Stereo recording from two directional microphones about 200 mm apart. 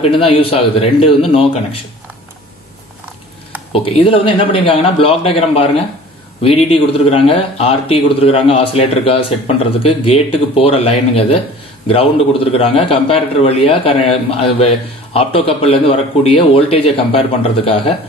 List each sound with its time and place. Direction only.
0.0 s a man's voice: 30° left (ahead or behind)
3.7 s a man's voice: 30° left (ahead or behind)